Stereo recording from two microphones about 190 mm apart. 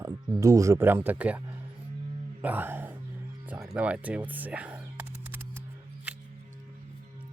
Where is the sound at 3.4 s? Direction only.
5° right (ahead or behind).